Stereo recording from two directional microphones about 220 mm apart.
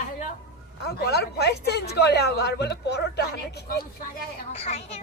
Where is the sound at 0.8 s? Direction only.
50° left (ahead or behind).